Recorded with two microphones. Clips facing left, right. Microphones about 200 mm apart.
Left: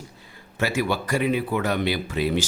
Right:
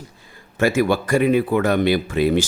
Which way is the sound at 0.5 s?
50° right (ahead or behind).